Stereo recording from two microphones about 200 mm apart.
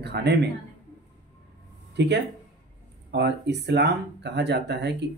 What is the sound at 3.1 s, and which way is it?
Speech, 55° right (ahead or behind).